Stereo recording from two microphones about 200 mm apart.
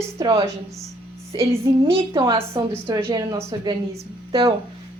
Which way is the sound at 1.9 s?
20° right (ahead or behind).